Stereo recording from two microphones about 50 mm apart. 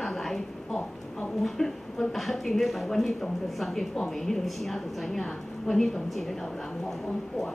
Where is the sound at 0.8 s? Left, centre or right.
Left.